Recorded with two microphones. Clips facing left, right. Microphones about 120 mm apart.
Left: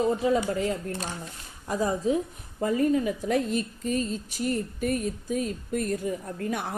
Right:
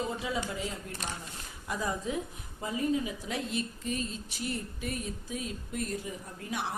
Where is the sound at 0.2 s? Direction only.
50° left (ahead or behind).